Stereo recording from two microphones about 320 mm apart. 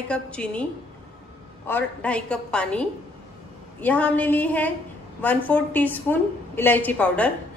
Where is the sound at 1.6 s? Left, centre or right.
Centre.